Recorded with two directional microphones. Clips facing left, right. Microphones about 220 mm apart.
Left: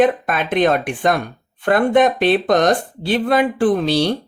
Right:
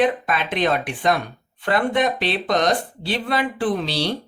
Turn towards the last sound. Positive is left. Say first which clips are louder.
# left 7 dB
turn(degrees=50)  # may be behind; listen again after turning